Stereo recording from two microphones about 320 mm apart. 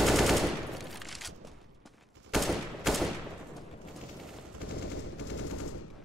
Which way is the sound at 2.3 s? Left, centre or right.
Centre.